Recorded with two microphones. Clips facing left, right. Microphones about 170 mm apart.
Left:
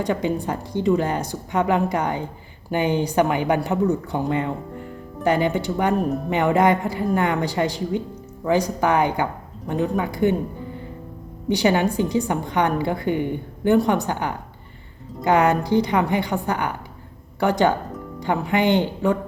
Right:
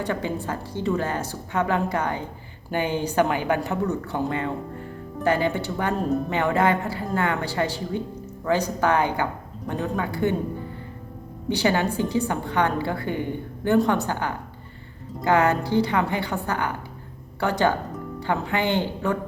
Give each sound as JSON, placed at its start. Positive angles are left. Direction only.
{"t": 0.0, "sound": "a woman's voice", "side_deg": 15}
{"t": 11.4, "sound": "a woman's voice", "side_deg": 15}